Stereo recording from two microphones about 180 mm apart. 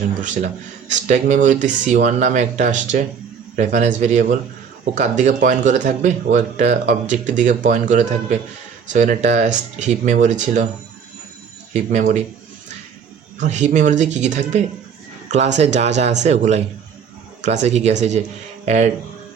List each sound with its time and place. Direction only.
0.2 s speech: 40° right (ahead or behind)
11.7 s speech: 45° right (ahead or behind)
13.4 s speech: 40° right (ahead or behind)